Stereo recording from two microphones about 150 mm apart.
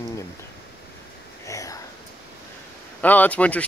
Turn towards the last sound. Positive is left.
turn(degrees=10)  # may be behind; listen again after turning